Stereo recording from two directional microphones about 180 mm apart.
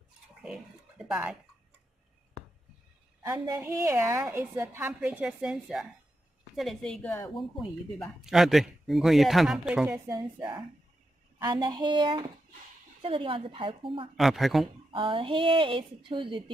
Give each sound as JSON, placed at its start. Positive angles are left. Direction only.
{"t": 0.4, "sound": "a sound", "side_deg": -5}
{"t": 3.2, "sound": "a woman's voice", "side_deg": -15}
{"t": 7.9, "sound": "a man's voice", "side_deg": 0}
{"t": 10.0, "sound": "a woman's voice", "side_deg": -20}
{"t": 14.1, "sound": "a man's voice", "side_deg": 0}
{"t": 14.9, "sound": "a woman's voice", "side_deg": -30}